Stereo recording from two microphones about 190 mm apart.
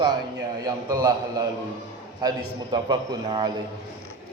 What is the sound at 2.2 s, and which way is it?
Speech, 20° right (ahead or behind).